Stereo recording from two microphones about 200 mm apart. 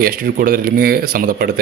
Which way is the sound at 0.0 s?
45° right (ahead or behind).